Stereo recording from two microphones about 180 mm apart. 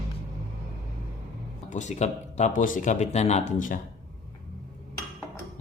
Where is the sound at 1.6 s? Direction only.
40° left (ahead or behind).